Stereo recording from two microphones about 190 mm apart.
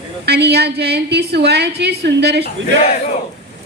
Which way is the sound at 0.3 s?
60° right (ahead or behind).